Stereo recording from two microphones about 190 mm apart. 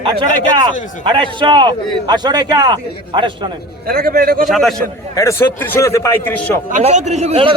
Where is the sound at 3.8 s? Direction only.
55° right (ahead or behind).